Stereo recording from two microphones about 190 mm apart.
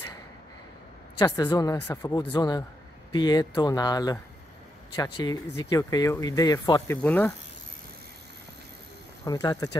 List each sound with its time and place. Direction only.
1.1 s speech: 20° left (ahead or behind)
7.0 s speech: 10° left (ahead or behind)
9.2 s speech: 20° left (ahead or behind)